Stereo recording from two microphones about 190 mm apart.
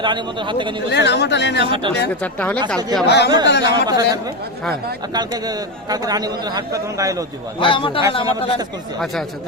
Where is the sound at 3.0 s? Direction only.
60° left (ahead or behind).